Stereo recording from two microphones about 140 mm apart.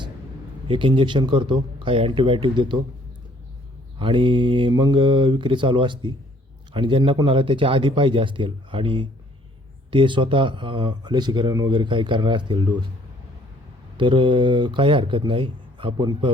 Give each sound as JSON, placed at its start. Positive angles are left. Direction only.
{"t": 0.7, "sound": "speech", "side_deg": -35}
{"t": 3.9, "sound": "speech", "side_deg": -35}
{"t": 13.9, "sound": "speech", "side_deg": -35}